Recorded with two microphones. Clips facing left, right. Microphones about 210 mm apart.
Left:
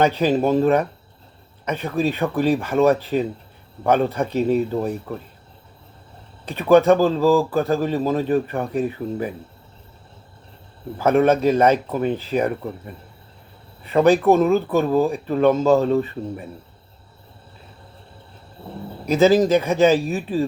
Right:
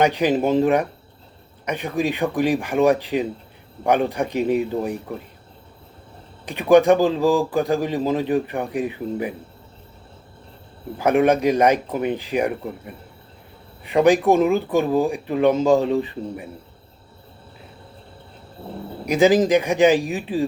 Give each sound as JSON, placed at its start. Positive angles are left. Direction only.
{"t": 0.0, "sound": "speech", "side_deg": -15}
{"t": 6.4, "sound": "speech", "side_deg": -15}
{"t": 10.9, "sound": "speech", "side_deg": -15}
{"t": 19.0, "sound": "speech", "side_deg": -15}